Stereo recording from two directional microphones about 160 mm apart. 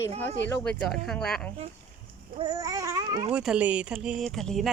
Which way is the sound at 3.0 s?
25° right (ahead or behind).